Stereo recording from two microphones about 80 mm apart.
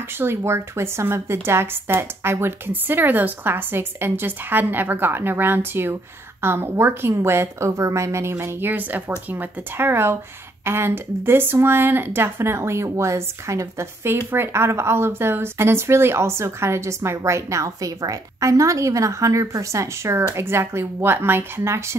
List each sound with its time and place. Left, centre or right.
0.2 s a woman's voice: right